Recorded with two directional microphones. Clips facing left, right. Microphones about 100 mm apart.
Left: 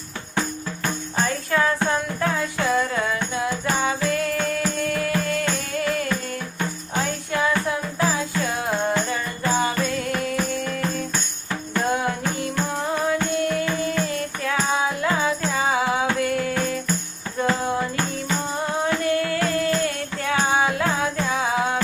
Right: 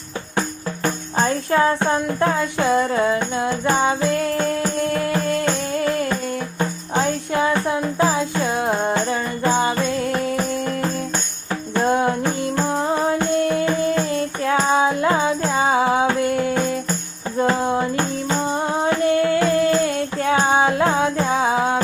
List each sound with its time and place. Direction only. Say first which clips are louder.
1.1 s music: right 5 dB; 30° right (ahead or behind)
11.7 s music: right 5 dB; 30° right (ahead or behind)